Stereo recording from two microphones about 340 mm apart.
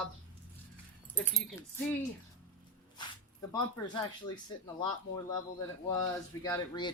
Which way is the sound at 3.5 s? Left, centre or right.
Centre.